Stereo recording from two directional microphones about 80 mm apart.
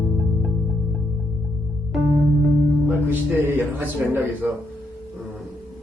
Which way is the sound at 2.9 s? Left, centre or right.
Right.